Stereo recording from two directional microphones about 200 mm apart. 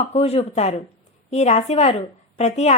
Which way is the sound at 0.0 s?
30° left (ahead or behind).